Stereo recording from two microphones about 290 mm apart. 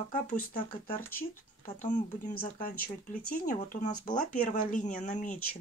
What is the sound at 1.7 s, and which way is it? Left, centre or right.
Speech, left.